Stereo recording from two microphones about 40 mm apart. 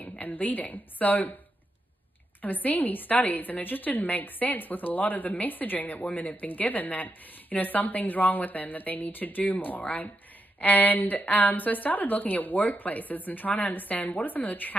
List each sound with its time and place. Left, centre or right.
0.2 s a woman's voice: left
2.4 s a woman's voice: left